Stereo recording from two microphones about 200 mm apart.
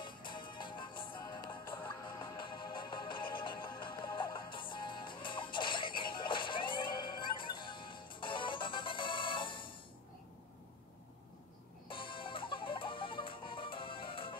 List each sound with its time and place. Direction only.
0.0 s music: 25° left (ahead or behind)
11.9 s music: 25° left (ahead or behind)